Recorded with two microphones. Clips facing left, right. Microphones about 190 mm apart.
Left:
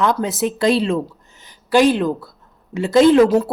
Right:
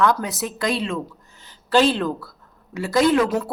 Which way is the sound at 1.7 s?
15° left (ahead or behind).